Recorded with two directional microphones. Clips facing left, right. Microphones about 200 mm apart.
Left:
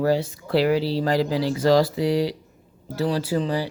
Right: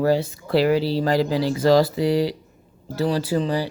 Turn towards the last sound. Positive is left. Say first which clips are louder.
# right 1 dB
turn(degrees=-35)  # may be behind; listen again after turning